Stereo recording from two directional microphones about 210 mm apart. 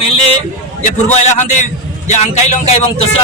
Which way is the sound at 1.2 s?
35° left (ahead or behind).